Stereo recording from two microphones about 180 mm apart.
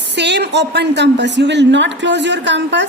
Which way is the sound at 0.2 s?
70° right (ahead or behind).